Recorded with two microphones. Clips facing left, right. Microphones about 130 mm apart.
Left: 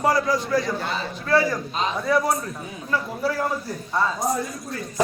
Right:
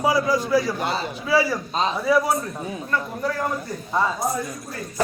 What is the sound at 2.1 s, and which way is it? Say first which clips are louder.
Speech: right 1 dB; centre (ahead or behind).